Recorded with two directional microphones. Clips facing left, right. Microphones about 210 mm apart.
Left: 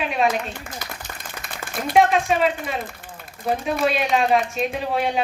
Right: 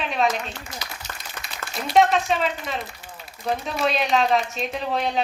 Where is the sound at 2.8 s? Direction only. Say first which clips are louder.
Left 3 dB; 55° left (ahead or behind).